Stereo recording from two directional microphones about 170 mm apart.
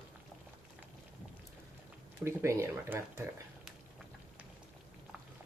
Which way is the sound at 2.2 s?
15° right (ahead or behind).